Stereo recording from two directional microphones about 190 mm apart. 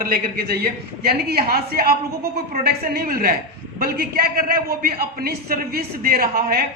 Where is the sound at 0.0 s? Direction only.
50° right (ahead or behind).